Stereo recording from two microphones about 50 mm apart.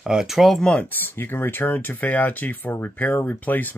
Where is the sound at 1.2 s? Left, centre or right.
Left.